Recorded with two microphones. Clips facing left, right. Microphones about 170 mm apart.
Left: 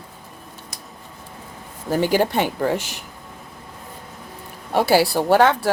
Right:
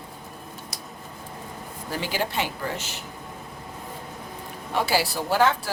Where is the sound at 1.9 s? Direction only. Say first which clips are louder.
Left 10 dB; 50° left (ahead or behind).